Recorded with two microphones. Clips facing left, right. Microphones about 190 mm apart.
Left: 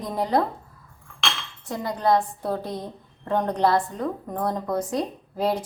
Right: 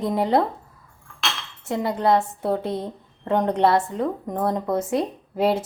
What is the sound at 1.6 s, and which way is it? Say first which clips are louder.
A woman's voice: right 3 dB; 25° right (ahead or behind).